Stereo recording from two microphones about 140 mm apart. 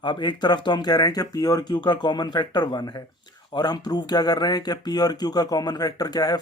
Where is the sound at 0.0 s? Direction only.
30° left (ahead or behind).